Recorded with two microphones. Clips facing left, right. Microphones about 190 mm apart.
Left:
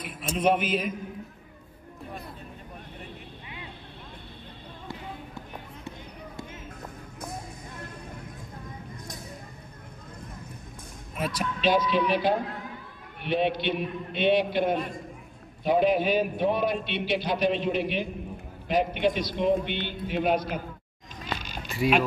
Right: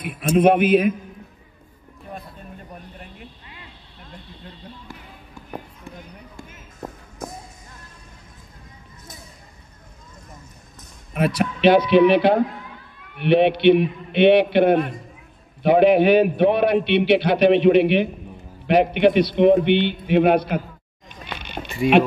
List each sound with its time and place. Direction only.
0.0 s a man's voice: 60° right (ahead or behind)
11.1 s a man's voice: 65° right (ahead or behind)